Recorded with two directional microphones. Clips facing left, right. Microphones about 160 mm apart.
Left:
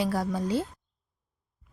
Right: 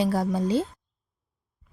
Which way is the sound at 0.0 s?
25° right (ahead or behind).